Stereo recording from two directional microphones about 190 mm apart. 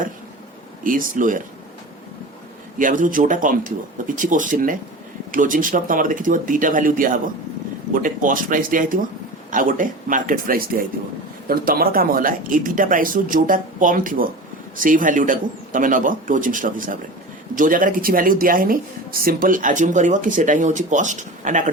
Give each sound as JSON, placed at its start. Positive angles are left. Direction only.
{"t": 0.9, "sound": "speech", "side_deg": -45}
{"t": 2.7, "sound": "speech", "side_deg": -45}